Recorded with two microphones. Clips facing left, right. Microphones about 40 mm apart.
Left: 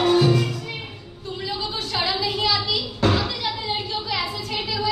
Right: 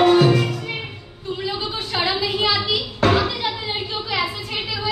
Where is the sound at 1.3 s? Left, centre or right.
Centre.